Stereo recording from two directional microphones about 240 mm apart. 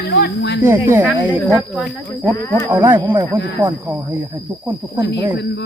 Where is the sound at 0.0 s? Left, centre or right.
Left.